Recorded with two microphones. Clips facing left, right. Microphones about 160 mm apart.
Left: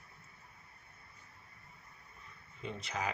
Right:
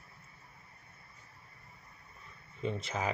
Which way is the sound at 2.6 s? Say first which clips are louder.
Right 4 dB; 25° right (ahead or behind).